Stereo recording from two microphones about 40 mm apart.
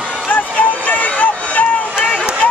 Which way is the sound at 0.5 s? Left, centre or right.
Left.